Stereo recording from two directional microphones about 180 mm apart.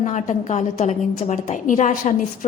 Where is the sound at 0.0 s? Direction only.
40° left (ahead or behind).